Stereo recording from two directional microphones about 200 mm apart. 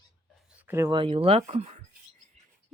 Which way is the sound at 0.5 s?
10° right (ahead or behind).